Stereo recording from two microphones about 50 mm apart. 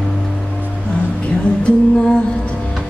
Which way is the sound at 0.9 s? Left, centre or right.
Left.